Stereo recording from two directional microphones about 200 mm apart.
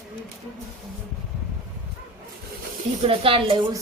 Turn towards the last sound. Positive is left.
turn(degrees=-25)  # may be behind; listen again after turning